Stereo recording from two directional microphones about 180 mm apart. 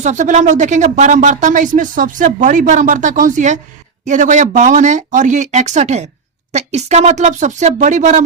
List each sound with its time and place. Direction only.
0.0 s speech: 40° right (ahead or behind)